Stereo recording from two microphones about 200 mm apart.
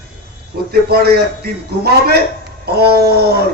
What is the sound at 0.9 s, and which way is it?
A man's voice, 55° right (ahead or behind).